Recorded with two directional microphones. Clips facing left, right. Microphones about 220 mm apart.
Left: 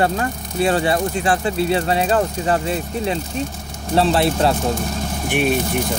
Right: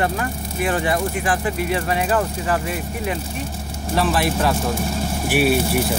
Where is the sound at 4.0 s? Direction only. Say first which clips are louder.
Left 3 dB; 25° left (ahead or behind).